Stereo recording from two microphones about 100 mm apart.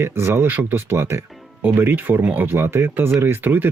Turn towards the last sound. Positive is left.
turn(degrees=-20)  # may be behind; listen again after turning